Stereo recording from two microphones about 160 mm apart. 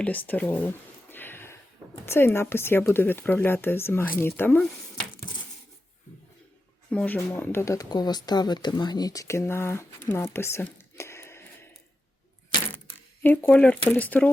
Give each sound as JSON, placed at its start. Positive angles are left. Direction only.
{"t": 0.0, "sound": "speech", "side_deg": 10}
{"t": 1.1, "sound": "a sound", "side_deg": 15}
{"t": 2.0, "sound": "speech", "side_deg": 15}
{"t": 5.2, "sound": "a sound", "side_deg": 60}
{"t": 6.9, "sound": "speech", "side_deg": 10}
{"t": 13.2, "sound": "speech", "side_deg": 10}